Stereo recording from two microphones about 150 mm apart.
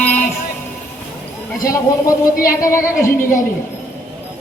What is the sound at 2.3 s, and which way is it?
Child singing, 70° left (ahead or behind).